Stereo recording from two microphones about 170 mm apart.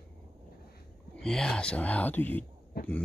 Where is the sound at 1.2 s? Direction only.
5° left (ahead or behind).